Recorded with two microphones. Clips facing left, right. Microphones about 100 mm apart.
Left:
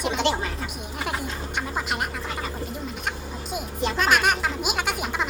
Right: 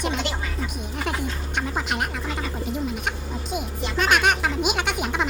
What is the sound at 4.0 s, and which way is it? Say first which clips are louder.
Speech: right 2 dB; centre (ahead or behind).